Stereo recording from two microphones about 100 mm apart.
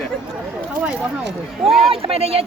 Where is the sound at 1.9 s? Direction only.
75° right (ahead or behind).